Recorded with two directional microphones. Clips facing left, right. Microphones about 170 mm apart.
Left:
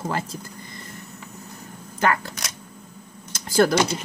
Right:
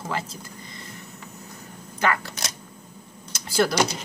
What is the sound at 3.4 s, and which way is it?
Speech, 50° left (ahead or behind).